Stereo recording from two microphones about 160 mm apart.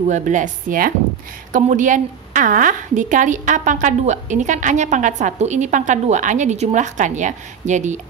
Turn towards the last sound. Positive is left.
turn(degrees=-50)  # may be behind; listen again after turning